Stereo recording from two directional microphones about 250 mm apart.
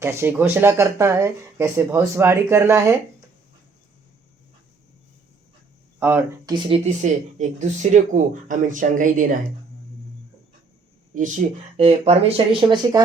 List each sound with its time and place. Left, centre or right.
0.0 s speech: centre
6.0 s speech: centre; by 9.2 s right
11.8 s speech: right